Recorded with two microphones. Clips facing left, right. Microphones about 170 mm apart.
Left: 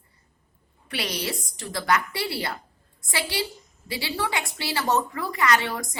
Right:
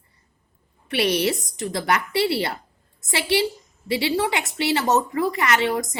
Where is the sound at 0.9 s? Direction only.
25° right (ahead or behind).